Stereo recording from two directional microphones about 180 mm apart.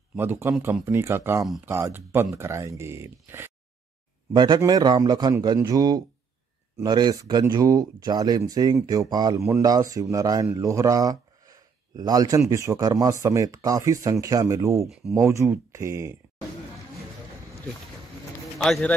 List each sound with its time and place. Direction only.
0.1 s speech: 10° right (ahead or behind)
4.3 s speech: 25° right (ahead or behind)
18.6 s speech: 5° left (ahead or behind)